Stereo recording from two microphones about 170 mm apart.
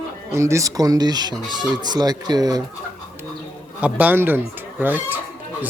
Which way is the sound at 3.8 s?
10° right (ahead or behind).